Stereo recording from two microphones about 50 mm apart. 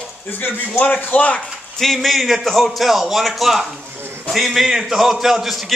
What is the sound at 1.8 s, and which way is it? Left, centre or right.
A man's voice, centre.